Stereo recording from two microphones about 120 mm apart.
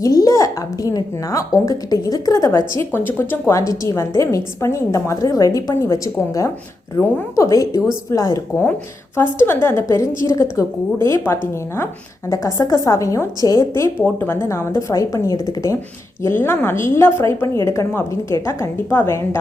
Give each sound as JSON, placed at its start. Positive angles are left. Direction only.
{"t": 0.0, "sound": "a woman's voice", "side_deg": 30}
{"t": 16.2, "sound": "a woman's voice", "side_deg": 20}